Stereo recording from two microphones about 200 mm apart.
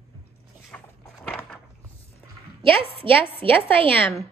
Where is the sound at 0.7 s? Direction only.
Centre (ahead or behind).